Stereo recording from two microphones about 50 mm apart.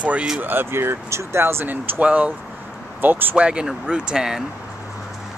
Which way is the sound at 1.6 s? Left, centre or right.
Right.